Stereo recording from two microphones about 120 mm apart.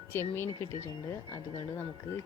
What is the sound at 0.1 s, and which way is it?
Speech, 20° left (ahead or behind).